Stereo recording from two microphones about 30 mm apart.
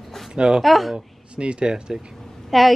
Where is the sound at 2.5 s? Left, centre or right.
Centre.